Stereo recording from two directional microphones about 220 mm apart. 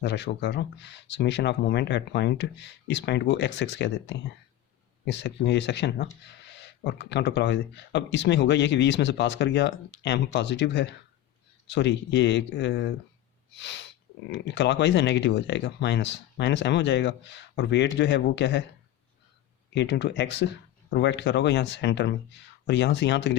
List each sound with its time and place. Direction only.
0.0 s speech: 50° left (ahead or behind)
19.7 s speech: 50° left (ahead or behind)